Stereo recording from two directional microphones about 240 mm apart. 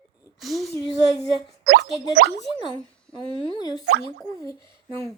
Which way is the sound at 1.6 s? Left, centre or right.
Right.